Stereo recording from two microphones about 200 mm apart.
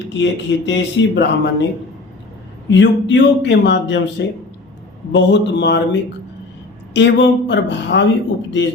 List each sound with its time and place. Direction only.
0.1 s speech: 60° left (ahead or behind)
2.6 s speech: 65° left (ahead or behind)
5.1 s speech: 60° left (ahead or behind)